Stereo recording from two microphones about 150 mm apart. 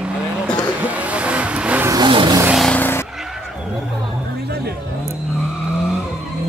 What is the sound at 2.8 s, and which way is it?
Vehicle, 15° left (ahead or behind).